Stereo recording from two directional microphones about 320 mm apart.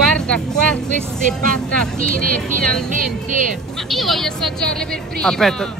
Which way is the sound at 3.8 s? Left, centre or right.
Centre.